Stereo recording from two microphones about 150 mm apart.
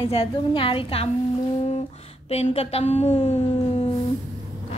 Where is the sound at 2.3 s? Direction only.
40° left (ahead or behind).